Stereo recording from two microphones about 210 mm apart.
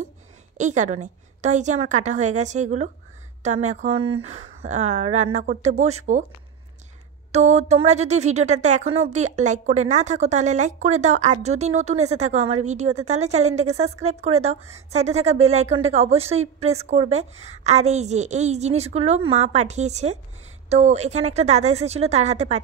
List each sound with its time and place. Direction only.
0.6 s a woman's voice: 35° right (ahead or behind)
7.3 s a woman's voice: 35° right (ahead or behind)